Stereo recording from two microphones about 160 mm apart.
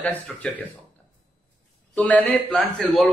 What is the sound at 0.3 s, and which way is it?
Speech, 10° left (ahead or behind).